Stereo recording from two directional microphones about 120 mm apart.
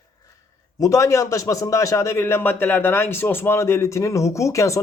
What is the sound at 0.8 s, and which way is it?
A man's voice, 25° left (ahead or behind).